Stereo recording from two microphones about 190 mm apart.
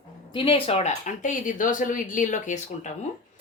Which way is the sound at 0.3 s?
30° left (ahead or behind).